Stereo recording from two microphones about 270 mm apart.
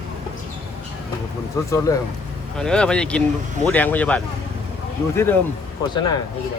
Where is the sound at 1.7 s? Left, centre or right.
Centre.